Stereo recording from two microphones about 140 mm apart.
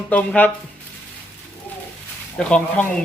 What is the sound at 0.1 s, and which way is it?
Speech, 10° left (ahead or behind).